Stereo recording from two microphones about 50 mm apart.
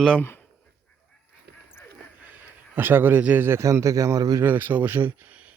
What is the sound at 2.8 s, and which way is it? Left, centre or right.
Speech, right.